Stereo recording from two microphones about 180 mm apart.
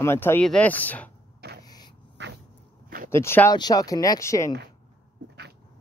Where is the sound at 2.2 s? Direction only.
75° right (ahead or behind).